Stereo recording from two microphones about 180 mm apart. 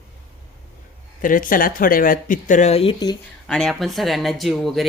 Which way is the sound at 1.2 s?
50° left (ahead or behind).